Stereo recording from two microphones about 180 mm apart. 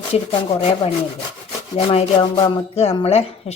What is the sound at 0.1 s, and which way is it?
Speech, 35° left (ahead or behind).